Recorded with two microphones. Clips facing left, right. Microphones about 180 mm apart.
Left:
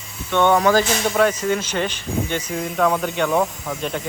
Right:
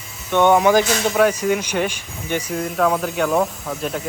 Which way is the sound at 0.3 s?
15° right (ahead or behind).